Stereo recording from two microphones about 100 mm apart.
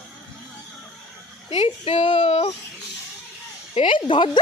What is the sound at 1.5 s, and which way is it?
Speech, 75° left (ahead or behind).